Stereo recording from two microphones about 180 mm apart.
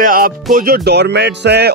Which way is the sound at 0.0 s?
50° right (ahead or behind).